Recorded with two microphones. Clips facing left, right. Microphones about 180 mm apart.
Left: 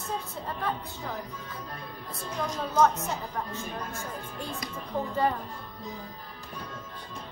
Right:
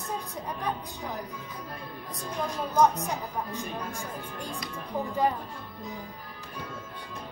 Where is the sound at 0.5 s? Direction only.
15° right (ahead or behind).